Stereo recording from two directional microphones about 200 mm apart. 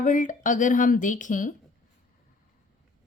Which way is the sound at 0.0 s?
40° left (ahead or behind).